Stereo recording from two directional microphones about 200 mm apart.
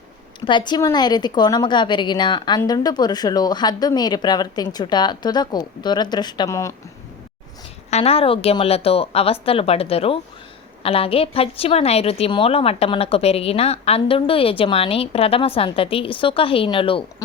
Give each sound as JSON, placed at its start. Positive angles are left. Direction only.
{"t": 0.4, "sound": "a woman's voice", "side_deg": 25}
{"t": 7.9, "sound": "a woman's voice", "side_deg": 30}